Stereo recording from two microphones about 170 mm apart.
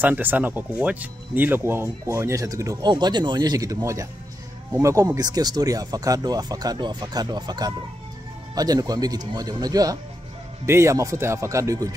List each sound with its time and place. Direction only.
0.0 s speech: 10° right (ahead or behind)